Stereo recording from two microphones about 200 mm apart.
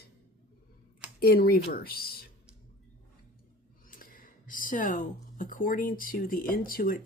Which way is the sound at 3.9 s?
45° left (ahead or behind).